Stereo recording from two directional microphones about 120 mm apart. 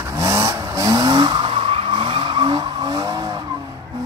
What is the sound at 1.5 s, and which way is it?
Vehicle, 50° right (ahead or behind).